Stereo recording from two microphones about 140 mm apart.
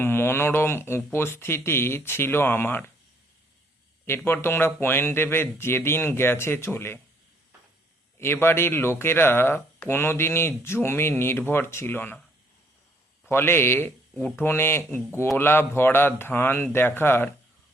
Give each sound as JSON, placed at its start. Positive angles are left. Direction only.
{"t": 0.0, "sound": "speech", "side_deg": 15}
{"t": 4.0, "sound": "speech", "side_deg": 15}
{"t": 8.2, "sound": "speech", "side_deg": 15}
{"t": 13.2, "sound": "speech", "side_deg": 15}